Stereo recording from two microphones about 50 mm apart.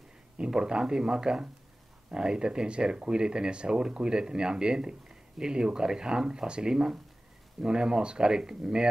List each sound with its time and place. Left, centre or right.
0.6 s speech: centre